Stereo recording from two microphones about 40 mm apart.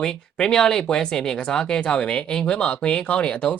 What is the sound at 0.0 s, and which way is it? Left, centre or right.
Speech, centre.